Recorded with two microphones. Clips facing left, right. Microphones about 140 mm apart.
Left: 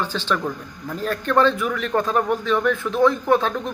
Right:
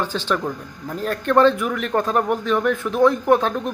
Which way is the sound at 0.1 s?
15° right (ahead or behind).